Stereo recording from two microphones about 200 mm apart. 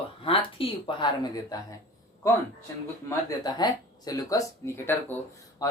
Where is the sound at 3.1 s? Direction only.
20° left (ahead or behind).